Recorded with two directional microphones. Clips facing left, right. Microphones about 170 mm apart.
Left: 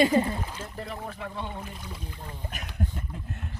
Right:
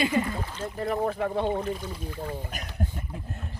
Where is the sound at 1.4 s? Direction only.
70° right (ahead or behind).